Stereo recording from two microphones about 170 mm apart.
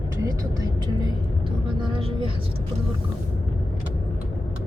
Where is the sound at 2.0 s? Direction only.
35° right (ahead or behind).